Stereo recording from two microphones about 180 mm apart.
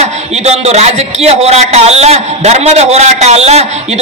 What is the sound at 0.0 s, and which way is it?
A man's voice, 35° right (ahead or behind).